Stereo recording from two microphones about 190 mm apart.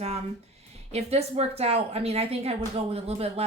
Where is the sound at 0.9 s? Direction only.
35° right (ahead or behind).